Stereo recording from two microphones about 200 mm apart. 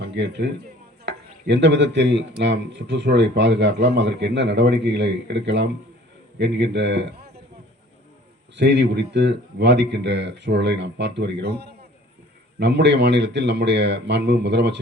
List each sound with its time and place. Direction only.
0.0 s a man's voice: 60° right (ahead or behind)
8.5 s speech: 60° right (ahead or behind)